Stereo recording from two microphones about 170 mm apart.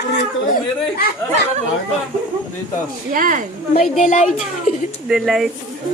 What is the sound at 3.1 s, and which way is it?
Speech, 55° right (ahead or behind).